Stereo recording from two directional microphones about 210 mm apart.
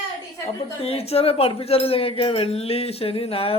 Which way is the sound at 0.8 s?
30° left (ahead or behind).